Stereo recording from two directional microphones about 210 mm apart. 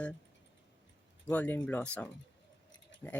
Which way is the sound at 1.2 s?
10° left (ahead or behind).